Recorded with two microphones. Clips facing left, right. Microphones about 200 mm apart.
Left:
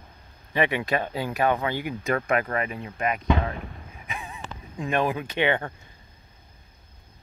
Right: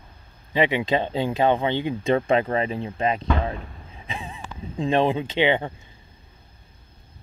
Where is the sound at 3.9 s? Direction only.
30° right (ahead or behind).